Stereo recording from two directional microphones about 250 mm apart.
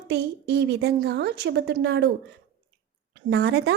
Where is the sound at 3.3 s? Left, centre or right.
Right.